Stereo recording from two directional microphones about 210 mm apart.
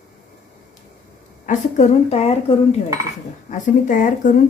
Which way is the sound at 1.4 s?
35° left (ahead or behind).